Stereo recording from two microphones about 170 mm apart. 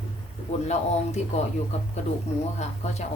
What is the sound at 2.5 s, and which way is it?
Speech, 40° left (ahead or behind).